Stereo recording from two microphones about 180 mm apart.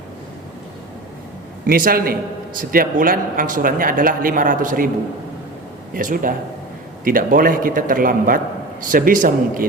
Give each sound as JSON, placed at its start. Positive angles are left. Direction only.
{"t": 1.6, "sound": "speech", "side_deg": -55}
{"t": 5.9, "sound": "speech", "side_deg": -50}